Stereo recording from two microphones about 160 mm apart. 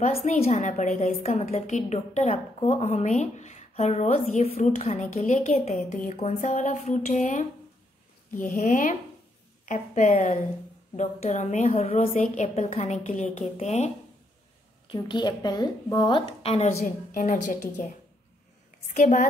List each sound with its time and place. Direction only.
0.0 s a woman's voice: 45° left (ahead or behind)
14.9 s a woman's voice: 30° left (ahead or behind)
16.8 s a woman's voice: 55° left (ahead or behind)
18.9 s a woman's voice: 50° left (ahead or behind)